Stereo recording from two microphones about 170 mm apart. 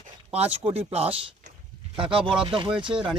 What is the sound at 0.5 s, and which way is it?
Speech, 35° right (ahead or behind).